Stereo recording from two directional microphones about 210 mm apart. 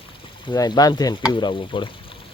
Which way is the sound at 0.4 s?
20° left (ahead or behind).